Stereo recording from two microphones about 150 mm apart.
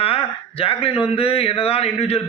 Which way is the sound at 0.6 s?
40° left (ahead or behind).